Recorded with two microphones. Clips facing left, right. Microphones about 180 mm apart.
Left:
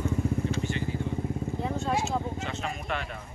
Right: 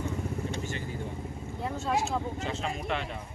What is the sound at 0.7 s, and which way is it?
Vehicle, 45° right (ahead or behind).